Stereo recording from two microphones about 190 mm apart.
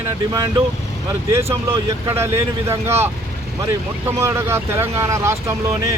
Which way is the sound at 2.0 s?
15° right (ahead or behind).